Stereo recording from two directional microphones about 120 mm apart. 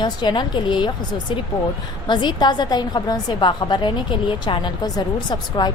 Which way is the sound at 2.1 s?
40° left (ahead or behind).